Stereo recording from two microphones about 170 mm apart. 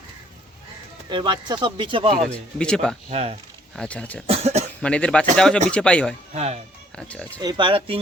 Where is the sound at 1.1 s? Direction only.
25° right (ahead or behind).